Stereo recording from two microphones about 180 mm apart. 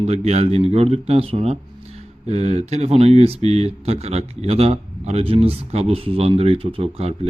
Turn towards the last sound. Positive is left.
turn(degrees=-35)  # may be behind; listen again after turning